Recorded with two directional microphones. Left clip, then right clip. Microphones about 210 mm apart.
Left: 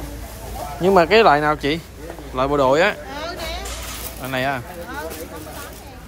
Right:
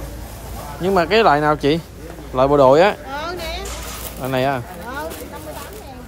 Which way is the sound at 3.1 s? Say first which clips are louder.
Right 3 dB; 50° right (ahead or behind).